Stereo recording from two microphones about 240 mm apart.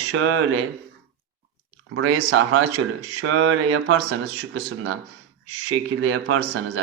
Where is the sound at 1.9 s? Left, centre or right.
Right.